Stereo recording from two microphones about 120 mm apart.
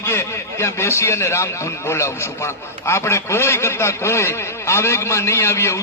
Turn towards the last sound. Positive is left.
turn(degrees=25)  # may be behind; listen again after turning